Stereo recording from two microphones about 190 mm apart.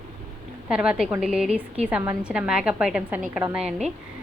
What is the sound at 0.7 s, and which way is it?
A woman's voice, 5° right (ahead or behind).